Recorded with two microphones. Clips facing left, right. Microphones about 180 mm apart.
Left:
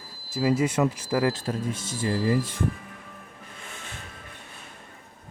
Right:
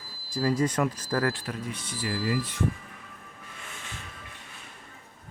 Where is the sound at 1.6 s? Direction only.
45° left (ahead or behind).